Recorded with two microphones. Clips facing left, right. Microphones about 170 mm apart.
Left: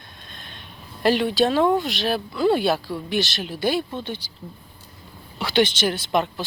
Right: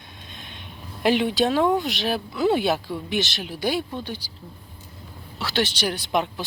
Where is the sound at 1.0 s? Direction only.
15° right (ahead or behind).